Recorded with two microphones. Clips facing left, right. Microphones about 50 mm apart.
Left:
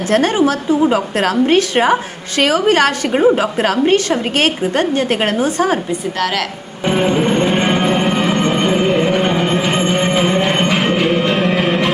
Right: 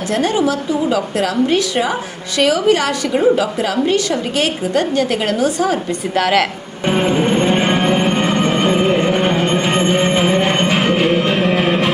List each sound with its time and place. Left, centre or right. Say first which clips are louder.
0.1 s a woman's voice: left 3 dB; left
6.1 s a woman's voice: right 6 dB; centre
6.8 s music: left 1 dB; centre